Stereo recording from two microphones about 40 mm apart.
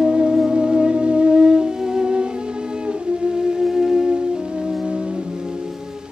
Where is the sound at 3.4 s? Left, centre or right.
Centre.